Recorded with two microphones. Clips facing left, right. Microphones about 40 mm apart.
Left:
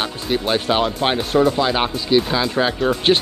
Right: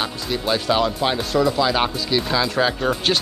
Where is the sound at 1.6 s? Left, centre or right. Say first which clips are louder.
Left 2 dB; centre.